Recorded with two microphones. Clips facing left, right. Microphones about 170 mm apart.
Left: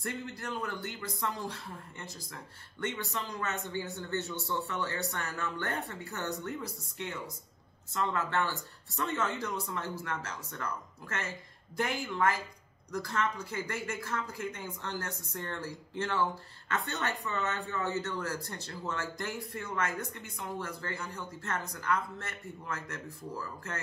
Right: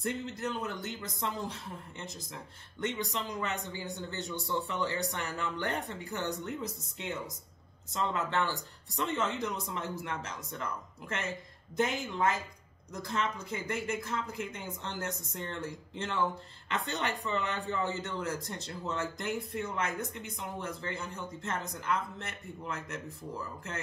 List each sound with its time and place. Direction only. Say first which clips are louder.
0.0 s a man's voice: right 4 dB; 20° right (ahead or behind)